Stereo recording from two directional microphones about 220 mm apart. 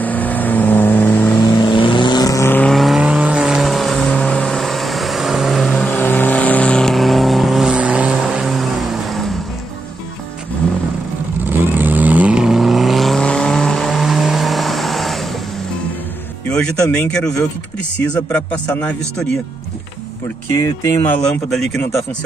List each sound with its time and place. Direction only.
0.0 s vehicle: 5° left (ahead or behind)
11.4 s vehicle: 10° right (ahead or behind)
16.5 s music: 5° left (ahead or behind)
16.9 s speech: 5° left (ahead or behind)
20.5 s speech: 15° left (ahead or behind)